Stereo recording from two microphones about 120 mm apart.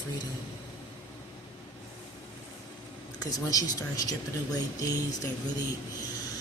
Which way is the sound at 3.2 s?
30° left (ahead or behind).